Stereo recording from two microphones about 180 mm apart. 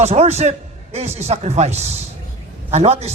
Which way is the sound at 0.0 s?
35° right (ahead or behind).